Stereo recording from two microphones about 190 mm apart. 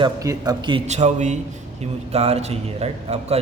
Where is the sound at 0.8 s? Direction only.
35° right (ahead or behind).